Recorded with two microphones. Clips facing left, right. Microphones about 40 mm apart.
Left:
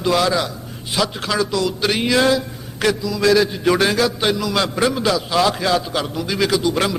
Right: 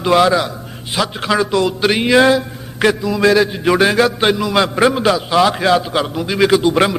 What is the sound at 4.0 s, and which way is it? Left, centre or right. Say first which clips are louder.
A man's voice: right 5 dB; right.